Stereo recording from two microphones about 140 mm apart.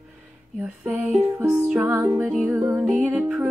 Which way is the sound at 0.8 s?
10° right (ahead or behind).